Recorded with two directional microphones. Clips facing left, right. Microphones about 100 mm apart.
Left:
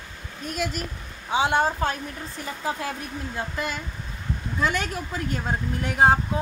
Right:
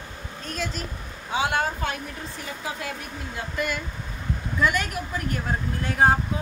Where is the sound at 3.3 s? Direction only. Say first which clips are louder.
Right 2 dB; 25° left (ahead or behind).